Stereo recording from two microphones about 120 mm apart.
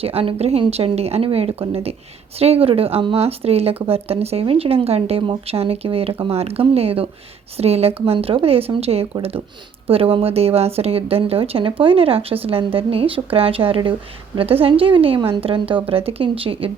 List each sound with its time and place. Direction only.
0.0 s a woman's voice: 55° right (ahead or behind)